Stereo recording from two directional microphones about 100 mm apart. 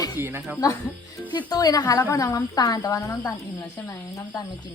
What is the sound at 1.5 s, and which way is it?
Speech, 40° left (ahead or behind).